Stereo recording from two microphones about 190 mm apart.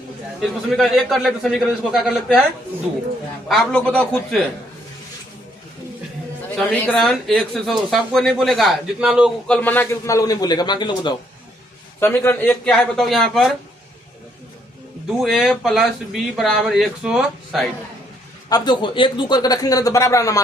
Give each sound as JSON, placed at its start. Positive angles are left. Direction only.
{"t": 0.4, "sound": "speech", "side_deg": 0}
{"t": 3.5, "sound": "speech", "side_deg": 0}
{"t": 6.6, "sound": "speech", "side_deg": 5}
{"t": 9.6, "sound": "a man's voice", "side_deg": 10}
{"t": 11.9, "sound": "speech", "side_deg": 10}
{"t": 15.2, "sound": "speech", "side_deg": 0}
{"t": 18.4, "sound": "a man's voice", "side_deg": 20}